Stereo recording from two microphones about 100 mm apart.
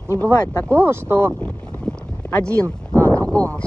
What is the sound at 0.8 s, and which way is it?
Speech, 25° right (ahead or behind).